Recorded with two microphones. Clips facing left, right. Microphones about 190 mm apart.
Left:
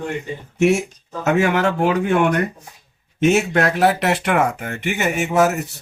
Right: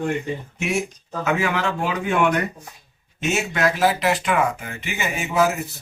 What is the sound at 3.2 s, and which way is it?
Speech, 60° left (ahead or behind).